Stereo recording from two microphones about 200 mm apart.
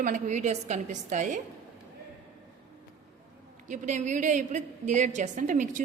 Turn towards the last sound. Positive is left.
turn(degrees=-40)  # may be behind; listen again after turning